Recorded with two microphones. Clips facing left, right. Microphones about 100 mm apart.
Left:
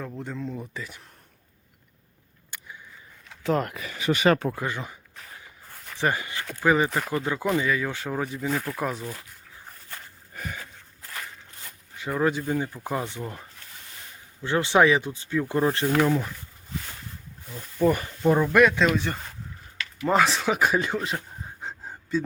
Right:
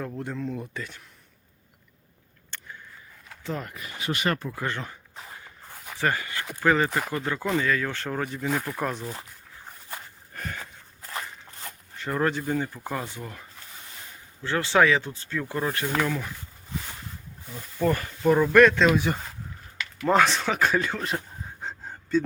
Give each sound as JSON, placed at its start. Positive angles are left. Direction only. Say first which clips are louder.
{"t": 0.0, "sound": "speech", "louder": "right 2 dB", "side_deg": 0}
{"t": 2.5, "sound": "a sound", "louder": "right 1 dB", "side_deg": 10}
{"t": 3.4, "sound": "speech", "louder": "left 8 dB", "side_deg": 75}
{"t": 4.3, "sound": "speech", "louder": "left 8 dB", "side_deg": 90}
{"t": 4.5, "sound": "speech", "louder": "even", "side_deg": 10}
{"t": 6.0, "sound": "speech", "louder": "left 1 dB", "side_deg": 20}
{"t": 10.3, "sound": "a sound", "louder": "even", "side_deg": 5}
{"t": 11.9, "sound": "speech", "louder": "left 1 dB", "side_deg": 5}
{"t": 14.4, "sound": "speech", "louder": "left 2 dB", "side_deg": 20}
{"t": 15.5, "sound": "speech", "louder": "left 4 dB", "side_deg": 25}
{"t": 17.7, "sound": "speech", "louder": "left 3 dB", "side_deg": 15}
{"t": 18.5, "sound": "speech", "louder": "right 4 dB", "side_deg": 5}
{"t": 20.1, "sound": "speech", "louder": "even", "side_deg": 5}
{"t": 21.6, "sound": "a sound", "louder": "right 2 dB", "side_deg": 5}